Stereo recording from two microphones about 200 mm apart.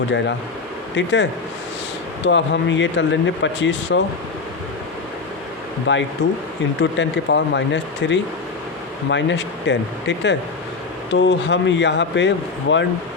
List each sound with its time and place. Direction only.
0.9 s speech: 60° left (ahead or behind)
5.9 s speech: 65° left (ahead or behind)